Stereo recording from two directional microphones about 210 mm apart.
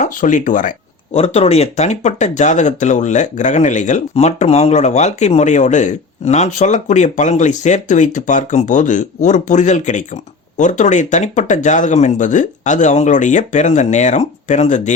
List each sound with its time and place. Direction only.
0.0 s speech: 35° left (ahead or behind)